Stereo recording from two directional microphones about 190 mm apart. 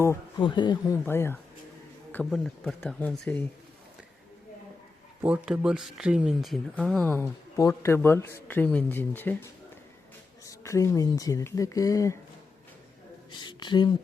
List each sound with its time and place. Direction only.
0.0 s speech: 15° left (ahead or behind)
1.0 s speech: 10° left (ahead or behind)
2.1 s speech: centre (ahead or behind)
5.2 s speech: 5° right (ahead or behind); by 12.1 s 15° left (ahead or behind)
13.4 s speech: 25° left (ahead or behind)